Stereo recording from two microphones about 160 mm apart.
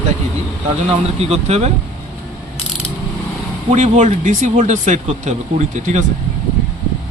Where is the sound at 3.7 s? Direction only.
50° right (ahead or behind).